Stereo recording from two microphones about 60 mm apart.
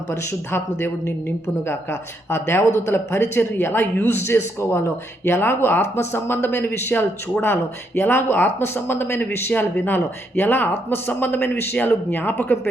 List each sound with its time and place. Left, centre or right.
0.2 s speech: left